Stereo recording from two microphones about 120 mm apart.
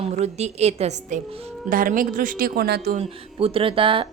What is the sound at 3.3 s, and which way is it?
Speech, 50° right (ahead or behind).